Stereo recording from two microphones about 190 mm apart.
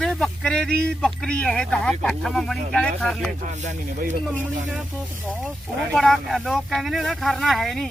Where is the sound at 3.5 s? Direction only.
40° right (ahead or behind).